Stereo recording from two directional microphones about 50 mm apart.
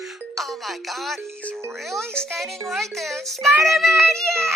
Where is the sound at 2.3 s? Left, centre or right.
Centre.